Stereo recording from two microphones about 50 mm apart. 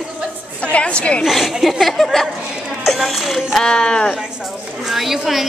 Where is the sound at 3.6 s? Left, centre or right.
Centre.